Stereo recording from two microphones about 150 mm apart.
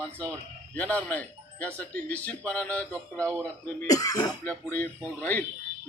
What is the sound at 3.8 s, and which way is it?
Speech, 25° left (ahead or behind).